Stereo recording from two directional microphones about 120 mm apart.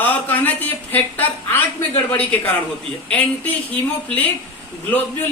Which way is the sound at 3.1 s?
10° left (ahead or behind).